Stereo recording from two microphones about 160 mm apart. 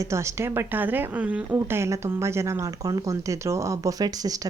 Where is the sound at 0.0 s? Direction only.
20° right (ahead or behind).